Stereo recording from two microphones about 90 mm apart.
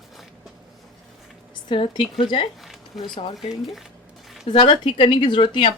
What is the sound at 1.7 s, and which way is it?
Speech, 65° left (ahead or behind).